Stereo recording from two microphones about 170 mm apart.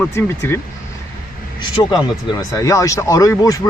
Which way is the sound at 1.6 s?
25° left (ahead or behind).